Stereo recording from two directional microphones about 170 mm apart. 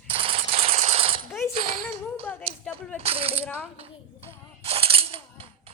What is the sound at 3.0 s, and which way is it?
Coin, 35° right (ahead or behind).